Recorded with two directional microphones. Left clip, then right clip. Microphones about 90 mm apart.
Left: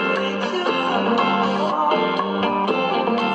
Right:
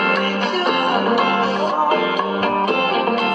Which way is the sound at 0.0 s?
15° left (ahead or behind).